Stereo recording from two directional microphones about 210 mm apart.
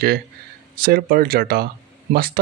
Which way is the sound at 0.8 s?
45° right (ahead or behind).